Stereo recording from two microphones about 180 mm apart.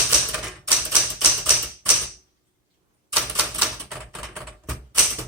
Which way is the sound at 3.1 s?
5° right (ahead or behind).